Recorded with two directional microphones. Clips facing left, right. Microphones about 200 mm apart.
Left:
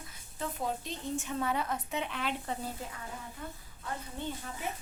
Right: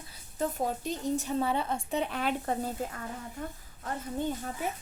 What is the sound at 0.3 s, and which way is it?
A woman's voice, 45° right (ahead or behind).